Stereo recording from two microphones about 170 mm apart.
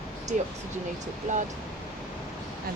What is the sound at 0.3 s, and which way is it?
Speech, 50° right (ahead or behind).